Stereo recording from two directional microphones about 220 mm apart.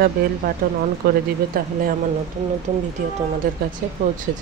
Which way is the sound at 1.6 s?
40° right (ahead or behind).